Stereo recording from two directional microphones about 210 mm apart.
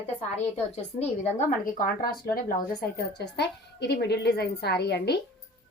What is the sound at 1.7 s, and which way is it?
A woman's voice, 45° left (ahead or behind).